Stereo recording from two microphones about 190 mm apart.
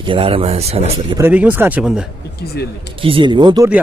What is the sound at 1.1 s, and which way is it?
Speech, 10° right (ahead or behind).